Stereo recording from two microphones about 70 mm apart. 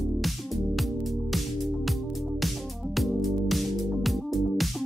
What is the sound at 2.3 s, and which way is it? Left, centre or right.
Music, centre.